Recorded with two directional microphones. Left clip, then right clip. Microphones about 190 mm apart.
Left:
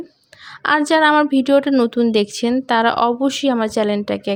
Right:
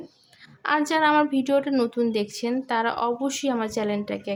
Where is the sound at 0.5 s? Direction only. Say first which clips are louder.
Left 8 dB; 40° left (ahead or behind).